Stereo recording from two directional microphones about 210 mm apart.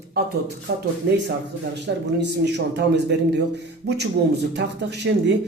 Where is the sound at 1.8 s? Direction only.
55° right (ahead or behind).